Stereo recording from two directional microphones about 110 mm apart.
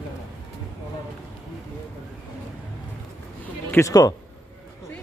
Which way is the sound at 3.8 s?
30° left (ahead or behind).